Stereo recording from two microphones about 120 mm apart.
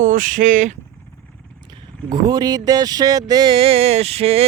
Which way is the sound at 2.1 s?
35° right (ahead or behind).